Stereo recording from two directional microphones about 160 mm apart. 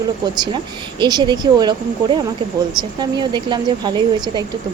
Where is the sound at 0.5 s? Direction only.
25° right (ahead or behind).